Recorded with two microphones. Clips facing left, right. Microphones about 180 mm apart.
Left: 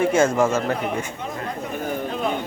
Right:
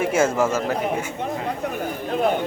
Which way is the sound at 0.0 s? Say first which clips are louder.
Left 2 dB; 5° right (ahead or behind).